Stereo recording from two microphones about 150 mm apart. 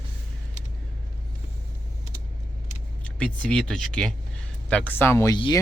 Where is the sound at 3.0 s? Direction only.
10° left (ahead or behind).